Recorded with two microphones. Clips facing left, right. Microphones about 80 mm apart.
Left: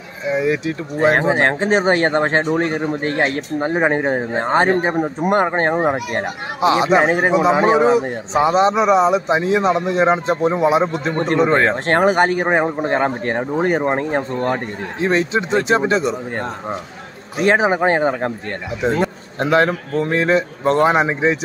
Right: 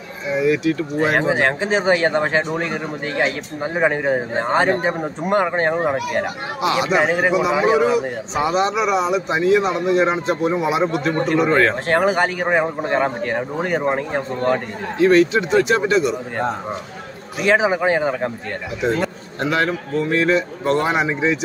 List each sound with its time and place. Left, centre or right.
0.3 s speech: left
1.3 s speech: left
3.8 s speech: left
5.2 s a man's voice: left
11.9 s a man's voice: left
17.4 s a man's voice: left
18.8 s a man's voice: centre
19.4 s a man's voice: left